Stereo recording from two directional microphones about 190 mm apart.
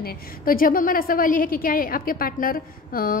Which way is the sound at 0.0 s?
50° left (ahead or behind).